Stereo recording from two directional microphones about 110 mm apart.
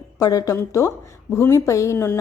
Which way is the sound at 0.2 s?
35° left (ahead or behind).